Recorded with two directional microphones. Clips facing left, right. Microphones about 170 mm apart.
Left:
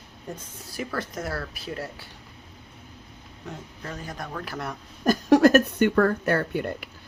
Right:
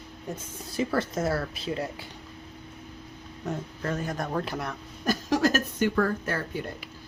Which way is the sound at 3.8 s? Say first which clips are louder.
Right 6 dB; 50° right (ahead or behind).